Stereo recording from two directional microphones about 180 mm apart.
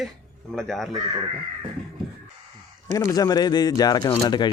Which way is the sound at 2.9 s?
20° left (ahead or behind).